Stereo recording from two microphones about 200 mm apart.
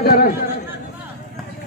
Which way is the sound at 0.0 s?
50° left (ahead or behind).